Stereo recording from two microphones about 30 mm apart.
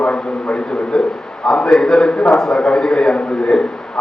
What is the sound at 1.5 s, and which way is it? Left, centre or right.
A man's voice, left.